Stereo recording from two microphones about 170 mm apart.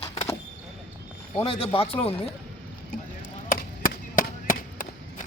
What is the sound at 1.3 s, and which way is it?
Speech, 35° left (ahead or behind).